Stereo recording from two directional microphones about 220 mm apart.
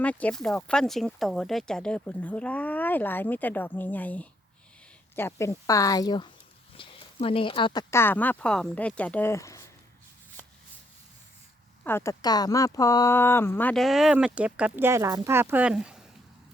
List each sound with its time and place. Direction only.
0.0 s speech: 5° left (ahead or behind)
11.8 s speech: 10° left (ahead or behind)